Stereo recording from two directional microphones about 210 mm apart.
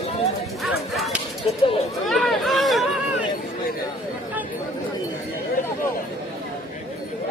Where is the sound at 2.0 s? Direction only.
Centre (ahead or behind).